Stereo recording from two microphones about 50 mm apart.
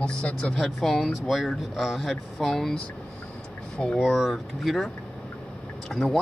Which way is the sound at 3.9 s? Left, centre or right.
Centre.